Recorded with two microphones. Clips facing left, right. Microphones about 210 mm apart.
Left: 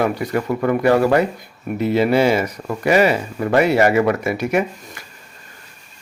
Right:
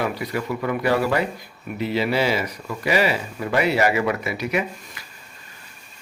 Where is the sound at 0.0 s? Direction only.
50° left (ahead or behind).